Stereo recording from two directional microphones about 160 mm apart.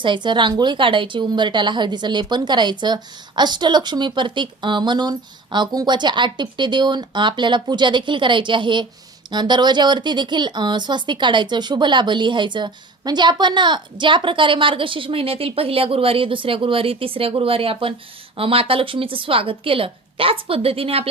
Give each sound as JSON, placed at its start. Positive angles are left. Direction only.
{"t": 0.0, "sound": "a woman's voice", "side_deg": -30}